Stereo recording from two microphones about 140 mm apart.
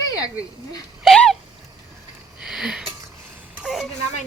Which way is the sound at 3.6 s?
Centre (ahead or behind).